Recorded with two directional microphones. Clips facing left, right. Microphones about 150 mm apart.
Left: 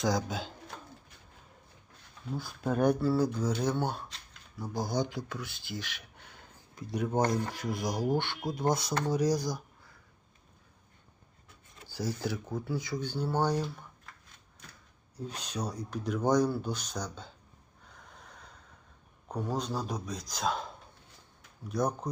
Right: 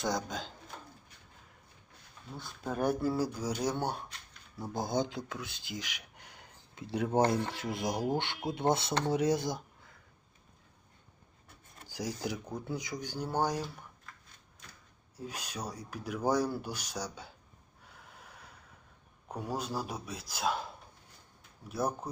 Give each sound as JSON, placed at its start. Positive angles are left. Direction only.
{"t": 0.0, "sound": "speech", "side_deg": 0}
{"t": 2.4, "sound": "speech", "side_deg": 0}
{"t": 4.5, "sound": "speech", "side_deg": -25}
{"t": 6.7, "sound": "speech", "side_deg": -25}
{"t": 11.9, "sound": "speech", "side_deg": -15}
{"t": 15.1, "sound": "speech", "side_deg": -10}
{"t": 17.9, "sound": "snort", "side_deg": -5}
{"t": 19.3, "sound": "speech", "side_deg": -10}
{"t": 21.7, "sound": "speech", "side_deg": -5}